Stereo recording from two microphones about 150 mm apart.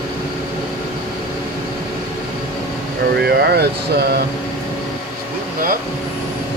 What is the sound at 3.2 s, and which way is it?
Speech, 90° right.